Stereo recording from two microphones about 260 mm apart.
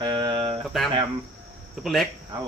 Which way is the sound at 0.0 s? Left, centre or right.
Centre.